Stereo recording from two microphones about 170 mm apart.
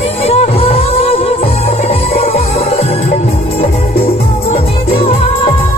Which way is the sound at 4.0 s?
35° left (ahead or behind).